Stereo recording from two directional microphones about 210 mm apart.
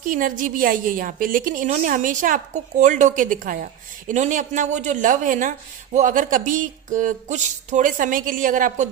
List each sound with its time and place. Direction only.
0.0 s a man's voice: 40° right (ahead or behind)